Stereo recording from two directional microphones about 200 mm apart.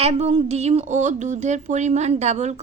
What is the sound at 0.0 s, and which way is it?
A woman's voice, 30° right (ahead or behind).